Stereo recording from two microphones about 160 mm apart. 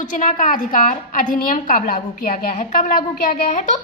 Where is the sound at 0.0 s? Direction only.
55° left (ahead or behind).